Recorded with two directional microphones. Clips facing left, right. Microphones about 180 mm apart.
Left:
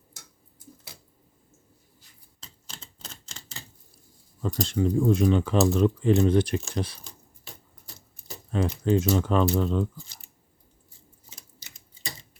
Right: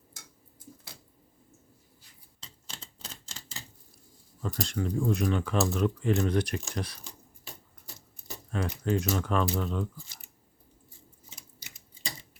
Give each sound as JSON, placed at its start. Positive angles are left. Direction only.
{"t": 4.4, "sound": "speech", "side_deg": 30}
{"t": 8.5, "sound": "speech", "side_deg": 30}